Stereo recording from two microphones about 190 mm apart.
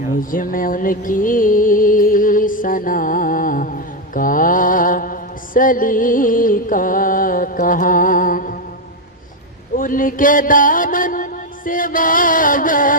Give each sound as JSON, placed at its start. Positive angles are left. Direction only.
{"t": 0.2, "sound": "music", "side_deg": 45}
{"t": 9.7, "sound": "mantra", "side_deg": 45}